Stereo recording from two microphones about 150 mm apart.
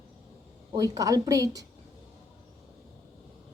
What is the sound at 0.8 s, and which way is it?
Speech, 25° right (ahead or behind).